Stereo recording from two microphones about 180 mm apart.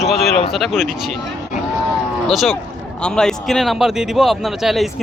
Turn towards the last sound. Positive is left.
turn(degrees=0)  # may be behind; listen again after turning